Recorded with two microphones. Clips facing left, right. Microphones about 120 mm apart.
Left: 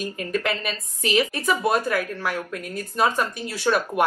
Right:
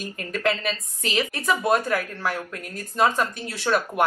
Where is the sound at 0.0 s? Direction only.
10° left (ahead or behind).